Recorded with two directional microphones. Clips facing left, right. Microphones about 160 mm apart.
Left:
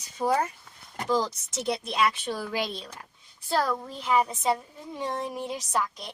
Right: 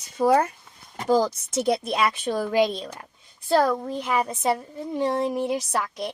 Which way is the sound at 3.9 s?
55° right (ahead or behind).